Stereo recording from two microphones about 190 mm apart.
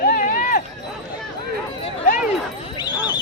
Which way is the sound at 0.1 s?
45° left (ahead or behind).